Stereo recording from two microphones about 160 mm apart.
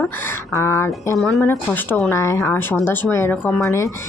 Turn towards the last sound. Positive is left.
turn(degrees=15)  # may be behind; listen again after turning